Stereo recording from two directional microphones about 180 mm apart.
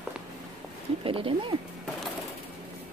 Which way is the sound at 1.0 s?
30° right (ahead or behind).